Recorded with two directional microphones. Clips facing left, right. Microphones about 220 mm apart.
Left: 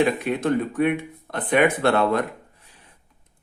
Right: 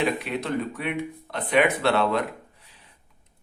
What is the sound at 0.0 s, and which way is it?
Speech, 50° left (ahead or behind).